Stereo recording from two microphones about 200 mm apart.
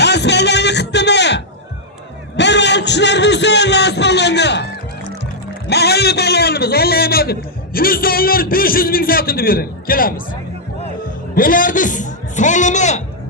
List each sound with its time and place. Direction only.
0.0 s music: 60° left (ahead or behind)
5.6 s a man's voice: 55° left (ahead or behind)
11.3 s a man's voice: 45° left (ahead or behind)